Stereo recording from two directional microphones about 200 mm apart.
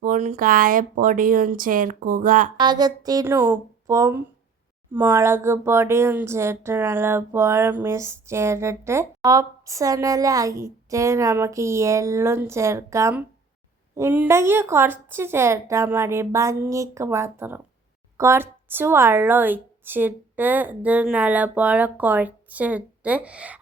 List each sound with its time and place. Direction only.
0.0 s speech: 40° right (ahead or behind)
2.6 s speech: 20° right (ahead or behind)